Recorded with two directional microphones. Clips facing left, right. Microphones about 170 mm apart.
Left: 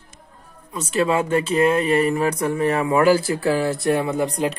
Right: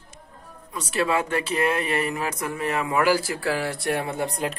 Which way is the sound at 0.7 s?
25° left (ahead or behind).